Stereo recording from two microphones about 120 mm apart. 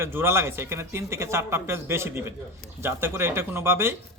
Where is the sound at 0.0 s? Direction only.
20° right (ahead or behind).